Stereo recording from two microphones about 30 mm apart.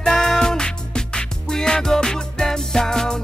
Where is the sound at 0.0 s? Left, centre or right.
Centre.